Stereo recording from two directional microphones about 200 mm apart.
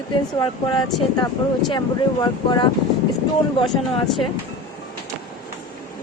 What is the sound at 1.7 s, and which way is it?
Speech, 20° left (ahead or behind).